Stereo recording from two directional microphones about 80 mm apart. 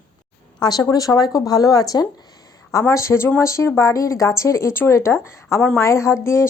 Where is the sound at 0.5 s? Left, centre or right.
Left.